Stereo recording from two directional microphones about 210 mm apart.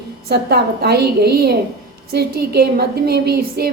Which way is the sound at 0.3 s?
50° right (ahead or behind).